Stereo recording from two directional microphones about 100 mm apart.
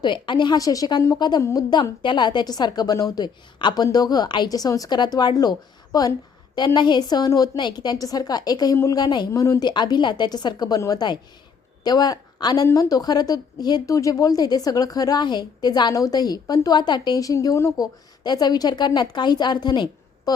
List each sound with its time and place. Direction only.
0.0 s a woman's voice: 50° left (ahead or behind); by 1.6 s 30° left (ahead or behind)
1.7 s a woman's voice: 50° left (ahead or behind); by 17.7 s 30° left (ahead or behind)
17.7 s a woman's voice: 45° left (ahead or behind)